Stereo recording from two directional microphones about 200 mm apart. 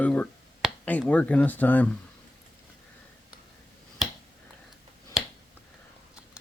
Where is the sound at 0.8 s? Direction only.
5° left (ahead or behind).